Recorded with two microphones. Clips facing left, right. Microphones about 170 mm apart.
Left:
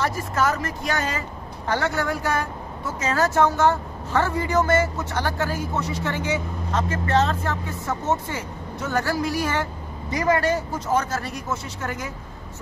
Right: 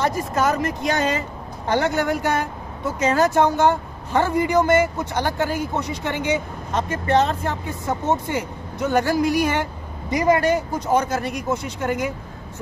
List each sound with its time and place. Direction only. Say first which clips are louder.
0.0 s a woman's voice: right 2 dB; 20° right (ahead or behind)